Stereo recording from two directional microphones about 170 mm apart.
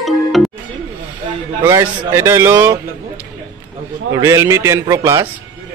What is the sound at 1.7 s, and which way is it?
A man's voice, 15° right (ahead or behind).